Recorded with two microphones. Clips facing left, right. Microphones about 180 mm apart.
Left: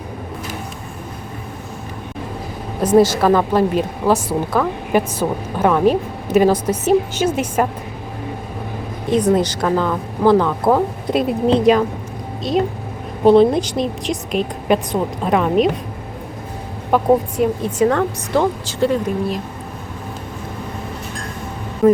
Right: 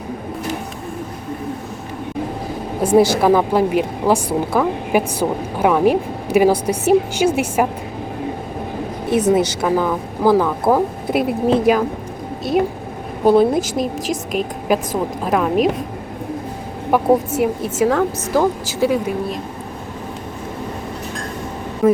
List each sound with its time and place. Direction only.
2.8 s a woman's voice: 10° right (ahead or behind)
9.1 s a woman's voice: 5° right (ahead or behind)
13.2 s a woman's voice: 5° right (ahead or behind)
17.4 s a woman's voice: 5° right (ahead or behind)
21.8 s a woman's voice: centre (ahead or behind)